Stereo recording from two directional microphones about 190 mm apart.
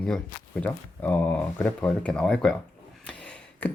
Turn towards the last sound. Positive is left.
turn(degrees=5)  # may be behind; listen again after turning